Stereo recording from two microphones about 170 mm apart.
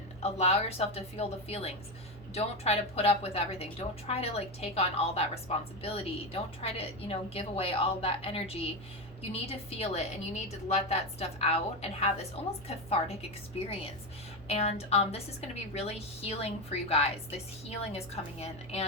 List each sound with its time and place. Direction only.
0.2 s a woman's voice: 40° left (ahead or behind)
14.4 s a woman's voice: 40° left (ahead or behind)